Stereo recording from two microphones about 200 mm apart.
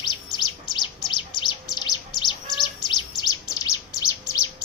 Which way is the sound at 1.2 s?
20° left (ahead or behind).